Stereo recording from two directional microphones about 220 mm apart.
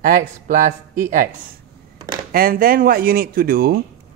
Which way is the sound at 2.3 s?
40° right (ahead or behind).